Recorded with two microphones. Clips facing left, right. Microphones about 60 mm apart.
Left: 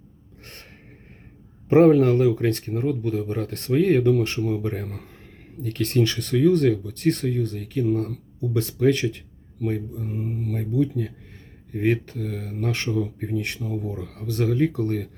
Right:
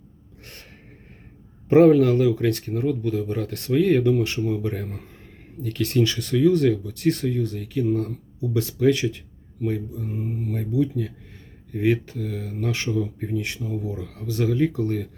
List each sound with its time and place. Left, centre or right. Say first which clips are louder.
1.7 s speech: right 1 dB; left
4.4 s speech: even; left
4.6 s speech: even; left